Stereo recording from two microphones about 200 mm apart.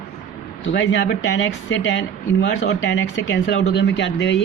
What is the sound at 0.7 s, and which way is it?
Speech, 65° left (ahead or behind).